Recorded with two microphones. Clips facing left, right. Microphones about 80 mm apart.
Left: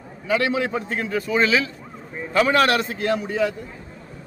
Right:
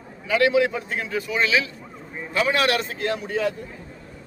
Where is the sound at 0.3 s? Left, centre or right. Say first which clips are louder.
Right 2 dB; left.